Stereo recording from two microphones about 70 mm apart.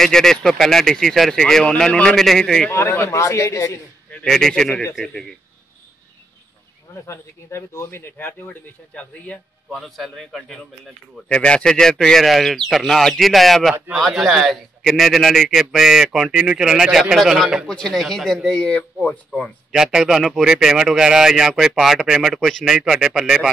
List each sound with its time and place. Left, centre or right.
0.0 s a man's voice: centre
2.7 s a man's voice: left
4.3 s a man's voice: centre
7.1 s speech: left
8.5 s speech: left
9.7 s a man's voice: centre
11.2 s a man's voice: centre
18.7 s speech: left
19.7 s a man's voice: centre